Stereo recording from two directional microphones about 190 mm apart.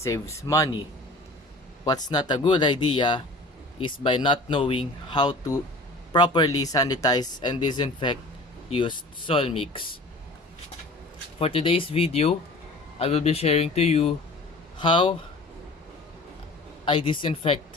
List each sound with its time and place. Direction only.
0.0 s speech: 15° left (ahead or behind)
11.3 s speech: 30° left (ahead or behind)
16.8 s speech: 30° left (ahead or behind)